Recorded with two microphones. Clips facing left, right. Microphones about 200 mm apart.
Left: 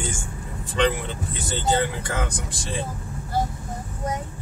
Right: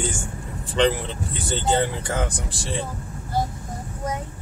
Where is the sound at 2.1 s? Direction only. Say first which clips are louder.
Right 2 dB; 30° right (ahead or behind).